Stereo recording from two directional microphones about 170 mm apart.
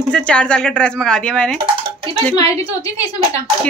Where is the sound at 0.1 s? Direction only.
5° left (ahead or behind).